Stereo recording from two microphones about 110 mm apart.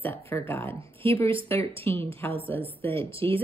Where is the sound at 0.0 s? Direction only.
20° left (ahead or behind).